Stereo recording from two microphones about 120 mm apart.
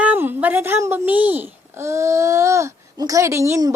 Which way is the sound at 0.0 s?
15° right (ahead or behind).